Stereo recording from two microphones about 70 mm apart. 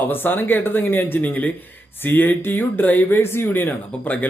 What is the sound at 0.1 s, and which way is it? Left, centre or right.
Speech, left.